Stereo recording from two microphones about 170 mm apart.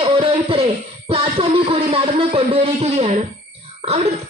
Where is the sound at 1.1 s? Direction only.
35° right (ahead or behind).